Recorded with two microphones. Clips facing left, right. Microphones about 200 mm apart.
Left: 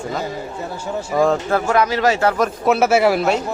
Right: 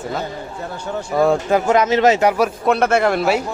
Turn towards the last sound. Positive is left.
turn(degrees=0)  # may be behind; listen again after turning